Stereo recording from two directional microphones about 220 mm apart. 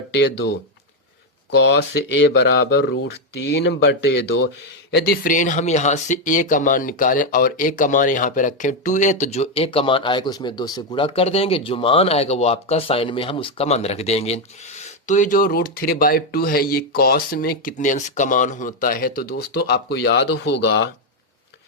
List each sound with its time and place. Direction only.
0.1 s speech: 50° left (ahead or behind)